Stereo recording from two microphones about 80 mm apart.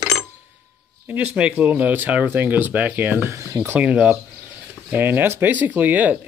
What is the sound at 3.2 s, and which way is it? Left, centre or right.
Speech, right.